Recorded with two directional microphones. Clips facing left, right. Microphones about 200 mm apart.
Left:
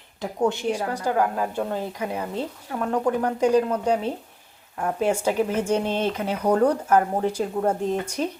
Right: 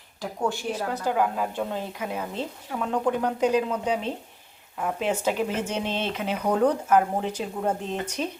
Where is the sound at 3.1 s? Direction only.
10° left (ahead or behind).